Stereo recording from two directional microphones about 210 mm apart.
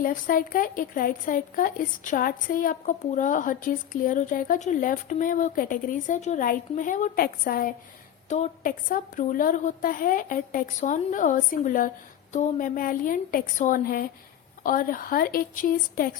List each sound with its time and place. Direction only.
0.0 s a woman's voice: 40° left (ahead or behind)